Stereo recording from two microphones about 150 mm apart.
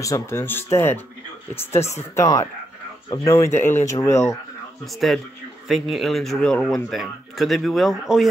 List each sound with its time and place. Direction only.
0.0 s speech: 20° left (ahead or behind)
5.7 s speech: centre (ahead or behind)